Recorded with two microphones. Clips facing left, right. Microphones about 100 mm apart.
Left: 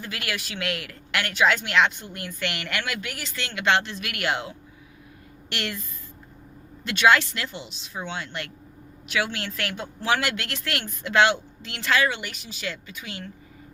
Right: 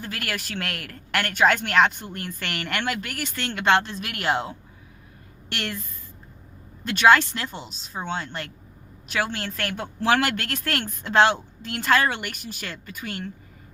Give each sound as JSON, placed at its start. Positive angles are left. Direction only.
{"t": 0.0, "sound": "speech", "side_deg": -45}
{"t": 6.8, "sound": "speech", "side_deg": -40}
{"t": 9.7, "sound": "speech", "side_deg": -60}